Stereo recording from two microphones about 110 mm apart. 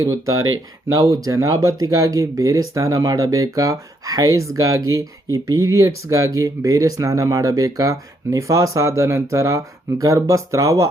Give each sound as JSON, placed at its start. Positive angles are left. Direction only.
{"t": 0.0, "sound": "speech", "side_deg": -30}